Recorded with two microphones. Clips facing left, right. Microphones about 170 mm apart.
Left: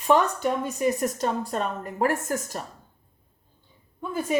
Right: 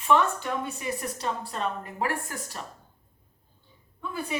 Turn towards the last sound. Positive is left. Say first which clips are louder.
# left 5 dB
turn(degrees=45)  # may be behind; listen again after turning